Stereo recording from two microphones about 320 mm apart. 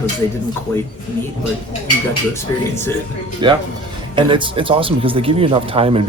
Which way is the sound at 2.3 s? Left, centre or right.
Centre.